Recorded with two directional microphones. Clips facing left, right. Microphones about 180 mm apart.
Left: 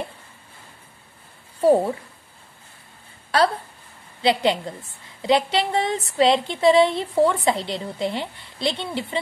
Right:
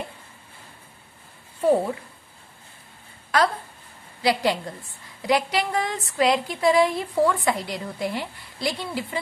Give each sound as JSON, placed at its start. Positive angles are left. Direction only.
{"t": 3.3, "sound": "speech", "side_deg": 30}